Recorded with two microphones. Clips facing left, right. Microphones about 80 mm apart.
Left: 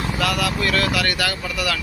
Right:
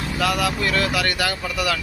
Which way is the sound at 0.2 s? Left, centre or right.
Right.